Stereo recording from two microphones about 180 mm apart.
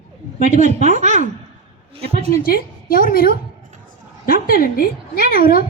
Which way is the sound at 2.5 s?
50° left (ahead or behind).